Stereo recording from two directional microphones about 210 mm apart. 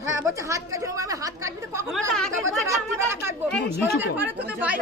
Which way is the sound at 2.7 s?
15° right (ahead or behind).